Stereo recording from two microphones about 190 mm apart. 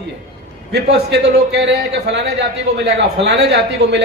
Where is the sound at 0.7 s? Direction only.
60° right (ahead or behind).